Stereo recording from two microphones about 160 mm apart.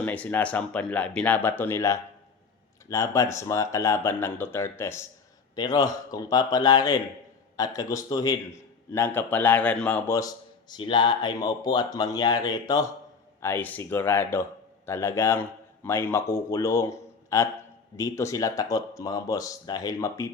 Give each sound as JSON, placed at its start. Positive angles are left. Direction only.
{"t": 0.0, "sound": "a man's voice", "side_deg": 10}
{"t": 10.1, "sound": "speech", "side_deg": 20}
{"t": 13.4, "sound": "a man's voice", "side_deg": 15}